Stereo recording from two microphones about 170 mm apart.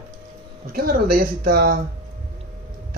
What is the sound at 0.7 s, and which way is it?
Speech, 60° right (ahead or behind).